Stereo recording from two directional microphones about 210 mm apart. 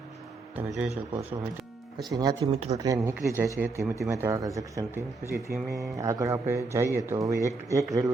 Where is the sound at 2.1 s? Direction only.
20° right (ahead or behind).